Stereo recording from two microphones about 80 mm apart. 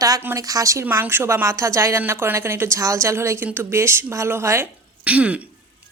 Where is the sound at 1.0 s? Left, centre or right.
Right.